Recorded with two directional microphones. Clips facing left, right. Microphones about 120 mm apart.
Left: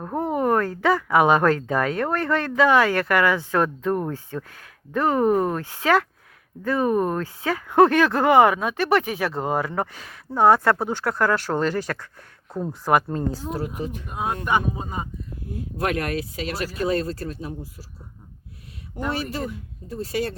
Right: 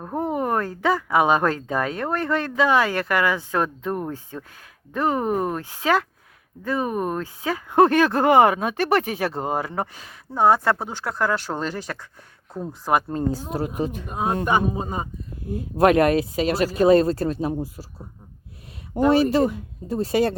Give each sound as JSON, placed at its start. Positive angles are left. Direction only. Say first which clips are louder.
{"t": 0.0, "sound": "a sound", "louder": "even", "side_deg": -5}
{"t": 0.3, "sound": "a sound", "louder": "left 6 dB", "side_deg": -20}
{"t": 1.0, "sound": "speech", "louder": "left 2 dB", "side_deg": -20}
{"t": 12.5, "sound": "speech", "louder": "left 3 dB", "side_deg": 5}
{"t": 13.1, "sound": "speech", "louder": "right 2 dB", "side_deg": -25}
{"t": 16.0, "sound": "speech", "louder": "right 8 dB", "side_deg": -20}
{"t": 16.9, "sound": "speech", "louder": "right 8 dB", "side_deg": -90}
{"t": 18.9, "sound": "speech", "louder": "right 10 dB", "side_deg": -25}
{"t": 19.3, "sound": "speech", "louder": "right 10 dB", "side_deg": -90}